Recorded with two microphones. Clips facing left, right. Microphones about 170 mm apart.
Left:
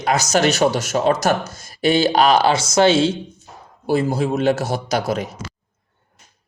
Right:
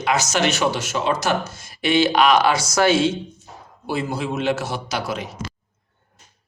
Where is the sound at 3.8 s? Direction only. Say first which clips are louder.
Left 6 dB; 40° left (ahead or behind).